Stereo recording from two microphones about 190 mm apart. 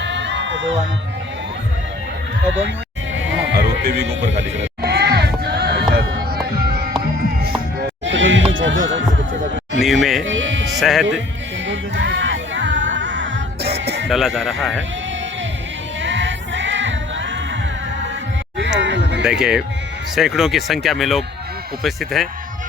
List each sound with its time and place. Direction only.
0.0 s music: 70° right (ahead or behind)
3.2 s music: 80° right
4.5 s a sound: 60° right (ahead or behind)
8.0 s music: 75° right (ahead or behind)
9.8 s music: centre (ahead or behind)
10.2 s music: 80° right
10.8 s speech: centre (ahead or behind)
11.7 s music: 70° right (ahead or behind)
14.1 s speech: centre (ahead or behind)
16.0 s choir: 75° right (ahead or behind)
18.8 s music: 70° right (ahead or behind)
19.2 s speech: 5° right (ahead or behind)